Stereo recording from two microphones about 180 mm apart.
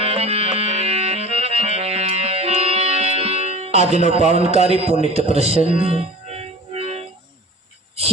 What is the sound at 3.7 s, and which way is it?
Music, 40° left (ahead or behind).